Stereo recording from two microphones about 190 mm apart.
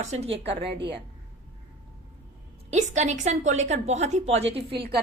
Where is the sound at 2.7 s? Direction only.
35° right (ahead or behind).